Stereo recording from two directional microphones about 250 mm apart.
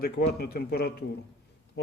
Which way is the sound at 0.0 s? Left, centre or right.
Left.